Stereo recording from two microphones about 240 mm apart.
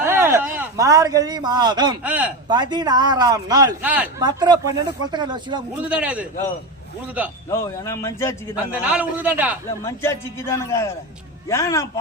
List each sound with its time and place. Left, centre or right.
0.0 s a man's voice: centre
2.0 s a man's voice: centre
2.5 s a man's voice: centre
4.2 s a man's voice: centre
5.8 s a man's voice: centre
7.5 s a man's voice: centre
8.5 s a man's voice: centre
9.8 s a man's voice: centre